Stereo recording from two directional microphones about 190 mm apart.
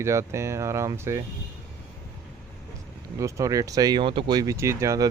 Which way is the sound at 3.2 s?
15° right (ahead or behind).